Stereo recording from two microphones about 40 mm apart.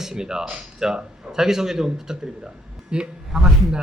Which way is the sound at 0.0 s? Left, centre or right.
Centre.